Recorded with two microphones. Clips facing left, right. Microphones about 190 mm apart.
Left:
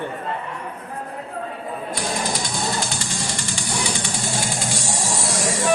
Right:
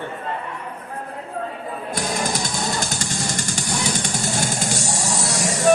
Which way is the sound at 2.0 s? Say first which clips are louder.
Right 2 dB; 45° right (ahead or behind).